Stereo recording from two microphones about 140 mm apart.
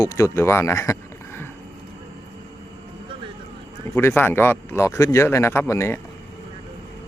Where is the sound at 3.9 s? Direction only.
15° left (ahead or behind).